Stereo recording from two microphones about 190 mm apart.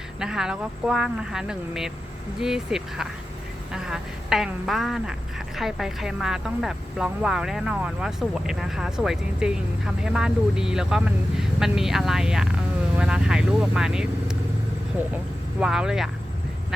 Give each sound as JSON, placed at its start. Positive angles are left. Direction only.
{"t": 0.2, "sound": "speech", "side_deg": -5}